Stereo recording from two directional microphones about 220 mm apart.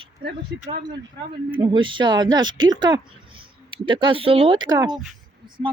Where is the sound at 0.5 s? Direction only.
50° right (ahead or behind).